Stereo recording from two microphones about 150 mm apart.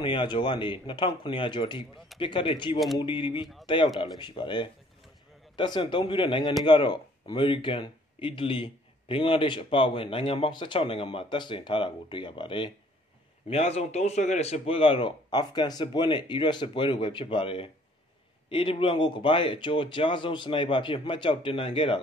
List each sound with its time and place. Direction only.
0.0 s speech: 30° left (ahead or behind)
13.5 s speech: 45° left (ahead or behind)